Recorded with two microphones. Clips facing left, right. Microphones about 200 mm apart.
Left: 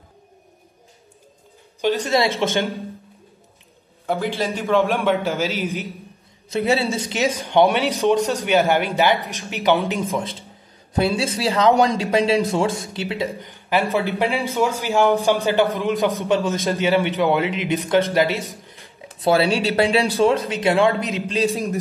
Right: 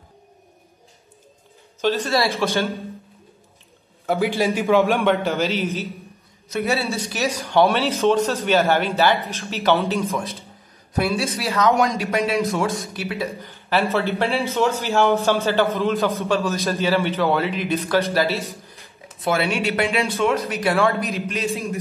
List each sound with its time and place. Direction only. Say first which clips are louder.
1.8 s speech: left 1 dB; 15° left (ahead or behind)
4.0 s a sound: right 2 dB; centre (ahead or behind)
4.4 s a man's voice: right 2 dB; 5° right (ahead or behind); by 5.9 s 10° left (ahead or behind)
6.5 s speech: left 3 dB; 30° left (ahead or behind)
10.1 s speech: left 2 dB; 30° left (ahead or behind)
13.4 s speech: right 2 dB; 15° left (ahead or behind)
19.1 s speech: left 4 dB; 30° left (ahead or behind)